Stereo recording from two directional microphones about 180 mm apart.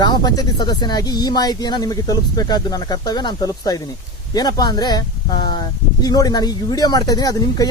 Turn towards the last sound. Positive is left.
turn(degrees=20)  # may be behind; listen again after turning